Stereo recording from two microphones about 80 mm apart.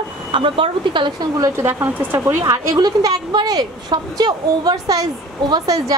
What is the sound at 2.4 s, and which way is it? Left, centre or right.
Speech, right.